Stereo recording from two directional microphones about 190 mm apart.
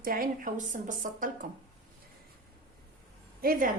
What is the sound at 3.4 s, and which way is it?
Speech, 50° right (ahead or behind).